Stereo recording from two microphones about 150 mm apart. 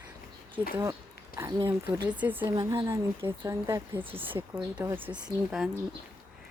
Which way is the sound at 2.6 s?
20° right (ahead or behind).